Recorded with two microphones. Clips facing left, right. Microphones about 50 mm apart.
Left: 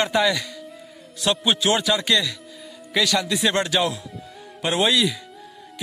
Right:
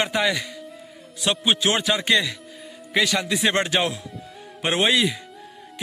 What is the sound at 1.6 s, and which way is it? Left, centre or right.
A man's voice, right.